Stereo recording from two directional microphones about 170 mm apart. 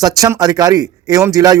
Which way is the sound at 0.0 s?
20° right (ahead or behind).